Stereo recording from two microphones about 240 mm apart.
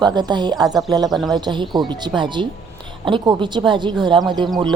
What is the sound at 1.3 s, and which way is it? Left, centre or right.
Speech, centre.